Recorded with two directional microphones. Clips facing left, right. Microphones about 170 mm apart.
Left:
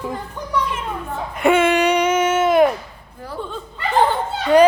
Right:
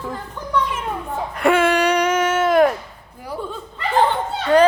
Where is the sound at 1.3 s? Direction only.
5° left (ahead or behind).